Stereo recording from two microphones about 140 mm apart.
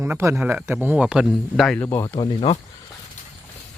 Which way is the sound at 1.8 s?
15° left (ahead or behind).